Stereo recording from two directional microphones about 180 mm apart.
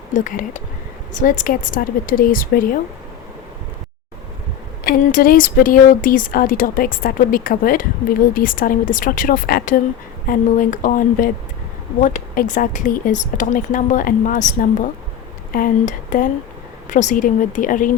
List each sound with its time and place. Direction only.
0.1 s speech: 45° left (ahead or behind)
4.8 s speech: 55° left (ahead or behind)